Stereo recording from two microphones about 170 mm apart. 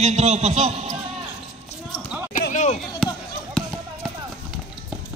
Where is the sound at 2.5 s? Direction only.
45° left (ahead or behind).